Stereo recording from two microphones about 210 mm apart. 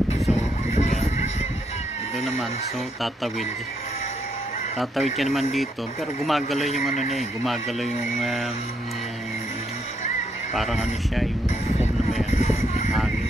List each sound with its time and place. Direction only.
0.3 s a sound: 30° left (ahead or behind)
4.7 s speech: centre (ahead or behind)
7.0 s speech: 30° left (ahead or behind)
7.4 s speech: centre (ahead or behind)
10.5 s speech: centre (ahead or behind)
12.4 s a sound: 30° left (ahead or behind)